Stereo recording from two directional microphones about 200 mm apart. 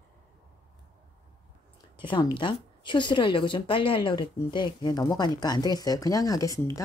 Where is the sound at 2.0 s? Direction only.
25° left (ahead or behind).